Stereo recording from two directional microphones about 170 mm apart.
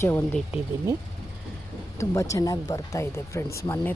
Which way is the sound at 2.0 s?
20° left (ahead or behind).